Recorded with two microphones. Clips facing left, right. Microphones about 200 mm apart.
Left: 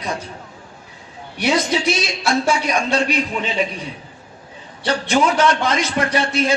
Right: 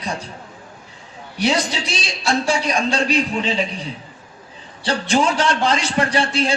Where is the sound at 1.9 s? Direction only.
30° right (ahead or behind).